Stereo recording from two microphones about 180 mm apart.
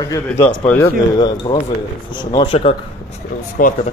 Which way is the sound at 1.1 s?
25° left (ahead or behind).